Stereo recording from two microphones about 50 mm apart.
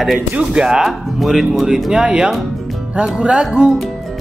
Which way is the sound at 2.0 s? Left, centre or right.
Right.